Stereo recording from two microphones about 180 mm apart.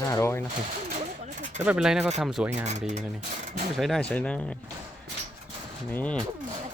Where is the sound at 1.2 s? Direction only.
40° right (ahead or behind).